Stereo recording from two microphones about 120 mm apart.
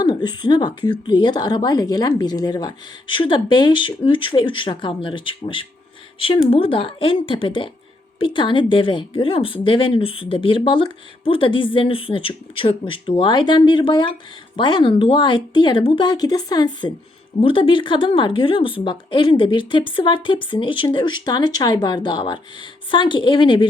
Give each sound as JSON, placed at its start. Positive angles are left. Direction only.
{"t": 0.0, "sound": "a woman's voice", "side_deg": 35}
{"t": 17.4, "sound": "a woman's voice", "side_deg": 45}